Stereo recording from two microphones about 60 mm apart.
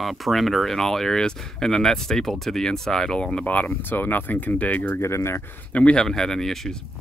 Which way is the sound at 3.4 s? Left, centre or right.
Left.